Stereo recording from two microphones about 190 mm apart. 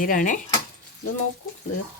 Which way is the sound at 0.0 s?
45° left (ahead or behind).